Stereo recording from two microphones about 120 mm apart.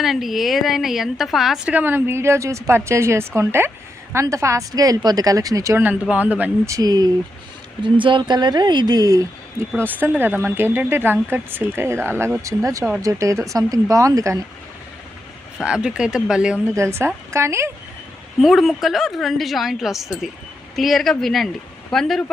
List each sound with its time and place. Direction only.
0.0 s a woman's voice: centre (ahead or behind); by 5.8 s 30° right (ahead or behind)
5.8 s a woman's voice: 15° right (ahead or behind)
6.7 s speech: 30° right (ahead or behind)
7.8 s speech: 45° right (ahead or behind)
9.8 s a woman's voice: 15° right (ahead or behind)
15.5 s a woman's voice: 5° right (ahead or behind)
16.7 s a woman's voice: 20° right (ahead or behind)
18.3 s a woman's voice: centre (ahead or behind)